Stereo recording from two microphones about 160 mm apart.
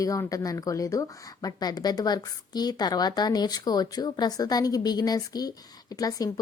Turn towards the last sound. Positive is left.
turn(degrees=25)  # may be behind; listen again after turning